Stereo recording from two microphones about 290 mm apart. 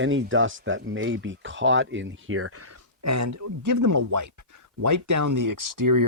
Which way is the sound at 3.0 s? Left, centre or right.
Right.